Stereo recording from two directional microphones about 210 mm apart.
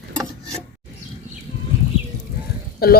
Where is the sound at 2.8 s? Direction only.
45° left (ahead or behind).